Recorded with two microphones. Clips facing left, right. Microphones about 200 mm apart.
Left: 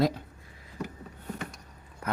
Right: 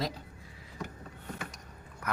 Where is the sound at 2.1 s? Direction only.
25° left (ahead or behind).